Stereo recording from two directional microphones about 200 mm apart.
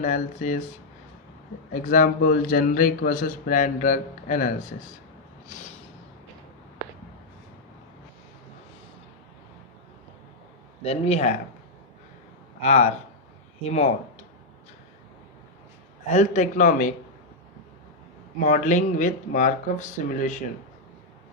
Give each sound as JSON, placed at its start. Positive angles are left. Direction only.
{"t": 0.0, "sound": "a man's voice", "side_deg": 35}
{"t": 1.7, "sound": "a man's voice", "side_deg": 40}
{"t": 5.5, "sound": "a sound", "side_deg": 35}
{"t": 10.8, "sound": "a man's voice", "side_deg": 30}
{"t": 12.6, "sound": "a man's voice", "side_deg": 35}
{"t": 16.0, "sound": "a man's voice", "side_deg": 35}
{"t": 18.3, "sound": "a man's voice", "side_deg": 45}